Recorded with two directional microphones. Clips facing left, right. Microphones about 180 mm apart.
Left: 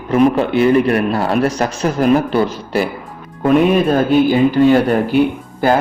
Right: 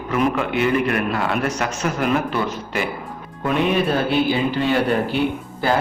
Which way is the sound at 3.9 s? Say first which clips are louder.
Left 7 dB; 45° left (ahead or behind).